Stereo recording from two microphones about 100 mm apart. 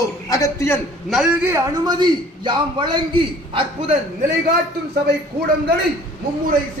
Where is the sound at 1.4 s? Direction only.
25° right (ahead or behind).